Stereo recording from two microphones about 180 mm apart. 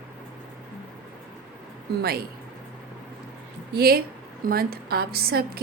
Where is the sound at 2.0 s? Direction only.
60° right (ahead or behind).